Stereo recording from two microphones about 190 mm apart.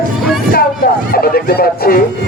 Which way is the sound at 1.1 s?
50° left (ahead or behind).